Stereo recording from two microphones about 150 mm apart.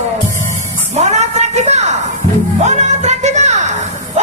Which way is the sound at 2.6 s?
50° right (ahead or behind).